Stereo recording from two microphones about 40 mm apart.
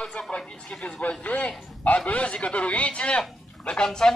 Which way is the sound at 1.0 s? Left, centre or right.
Left.